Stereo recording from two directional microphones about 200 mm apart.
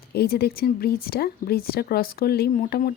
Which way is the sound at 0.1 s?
55° left (ahead or behind).